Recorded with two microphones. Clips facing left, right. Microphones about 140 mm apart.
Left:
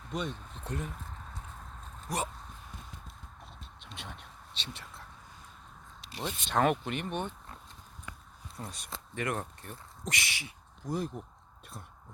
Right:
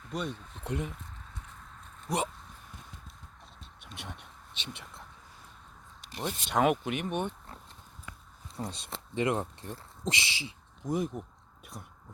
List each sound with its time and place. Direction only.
0.1 s speech: 10° right (ahead or behind)
2.0 s speech: 20° right (ahead or behind)
3.9 s speech: 15° right (ahead or behind)
6.2 s speech: 10° right (ahead or behind)
8.6 s speech: 25° right (ahead or behind)
10.9 s speech: 10° right (ahead or behind)